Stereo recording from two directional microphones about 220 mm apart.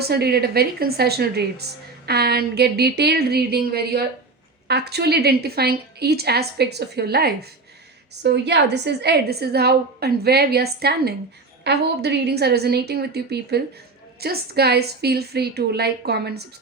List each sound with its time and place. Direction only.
0.0 s a woman's voice: 45° right (ahead or behind)